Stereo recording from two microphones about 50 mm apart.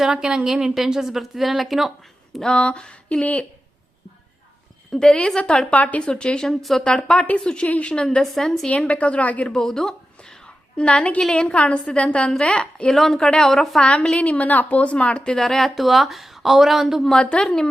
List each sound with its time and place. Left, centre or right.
0.0 s speech: centre
2.4 s a woman's voice: centre
4.9 s a woman's voice: centre
6.6 s a woman's voice: centre
6.8 s a woman's voice: centre
8.0 s a woman's voice: centre
8.7 s a woman's voice: left
9.5 s a sound: centre
11.2 s a woman's voice: centre
13.0 s a woman's voice: centre
14.2 s a woman's voice: left; by 17.2 s centre
17.2 s a woman's voice: centre